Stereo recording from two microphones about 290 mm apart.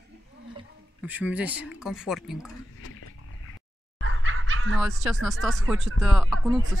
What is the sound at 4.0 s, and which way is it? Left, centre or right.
Fowl, right.